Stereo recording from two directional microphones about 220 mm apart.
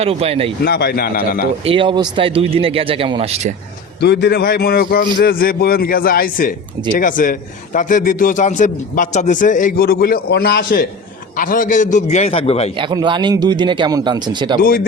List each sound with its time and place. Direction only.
0.0 s speech: 25° right (ahead or behind)
0.6 s a man's voice: 45° left (ahead or behind)
1.6 s speech: 25° right (ahead or behind)
4.0 s a man's voice: 50° left (ahead or behind); by 12.7 s 25° left (ahead or behind)
12.7 s speech: 20° right (ahead or behind)